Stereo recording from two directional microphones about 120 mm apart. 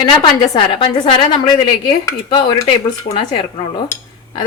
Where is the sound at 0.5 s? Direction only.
45° left (ahead or behind).